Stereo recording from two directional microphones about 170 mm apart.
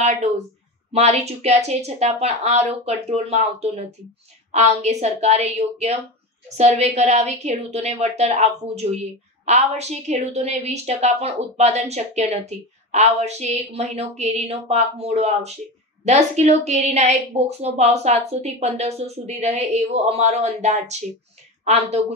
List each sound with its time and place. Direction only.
0.9 s a woman's voice: 40° right (ahead or behind)